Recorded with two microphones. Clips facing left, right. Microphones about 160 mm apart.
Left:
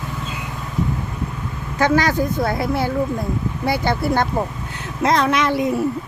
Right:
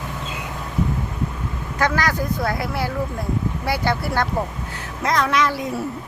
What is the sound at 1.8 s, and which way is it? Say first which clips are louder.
A woman's voice: left 4 dB; 25° left (ahead or behind).